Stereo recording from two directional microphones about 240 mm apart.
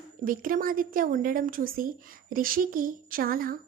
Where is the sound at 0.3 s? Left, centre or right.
Right.